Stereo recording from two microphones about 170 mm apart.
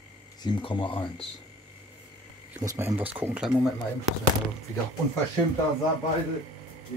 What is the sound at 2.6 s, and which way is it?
Speech, 20° right (ahead or behind).